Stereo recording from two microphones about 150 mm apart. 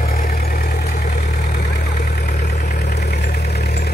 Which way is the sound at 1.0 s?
50° left (ahead or behind).